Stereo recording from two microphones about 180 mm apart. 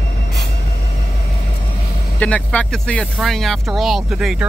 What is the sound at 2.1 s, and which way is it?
Speech, 5° left (ahead or behind).